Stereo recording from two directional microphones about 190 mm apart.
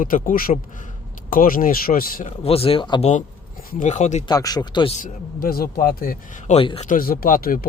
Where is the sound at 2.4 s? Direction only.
30° left (ahead or behind).